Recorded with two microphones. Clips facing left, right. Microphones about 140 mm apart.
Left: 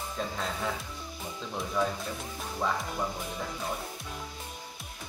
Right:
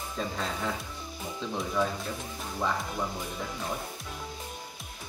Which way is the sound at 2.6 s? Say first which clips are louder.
Even; centre (ahead or behind).